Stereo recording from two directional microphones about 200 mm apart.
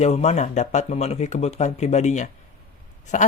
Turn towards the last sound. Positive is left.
turn(degrees=40)  # may be behind; listen again after turning